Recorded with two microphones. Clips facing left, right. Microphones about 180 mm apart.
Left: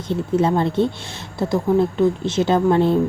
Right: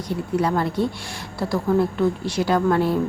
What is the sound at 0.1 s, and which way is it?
Speech, 25° left (ahead or behind).